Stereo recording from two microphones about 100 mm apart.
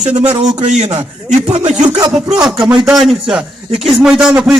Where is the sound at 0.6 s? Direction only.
50° right (ahead or behind).